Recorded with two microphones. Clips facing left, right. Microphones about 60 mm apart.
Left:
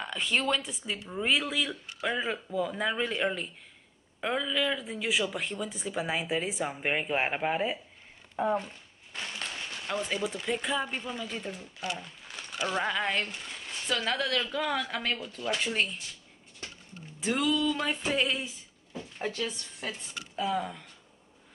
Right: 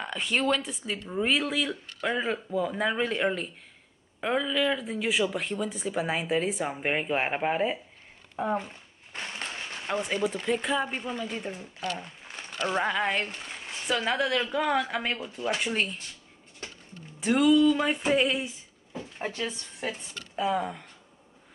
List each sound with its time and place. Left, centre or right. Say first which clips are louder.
0.0 s speech: right 2 dB; centre
8.5 s a sound: right 1 dB; right
10.4 s speech: right 3 dB; centre
12.0 s a sound: right 2 dB; right
12.6 s speech: right 3 dB; centre
15.7 s speech: right 1 dB; centre
17.3 s speech: right 7 dB; centre